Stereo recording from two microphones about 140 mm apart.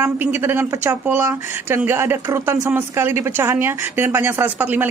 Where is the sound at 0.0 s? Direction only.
15° right (ahead or behind).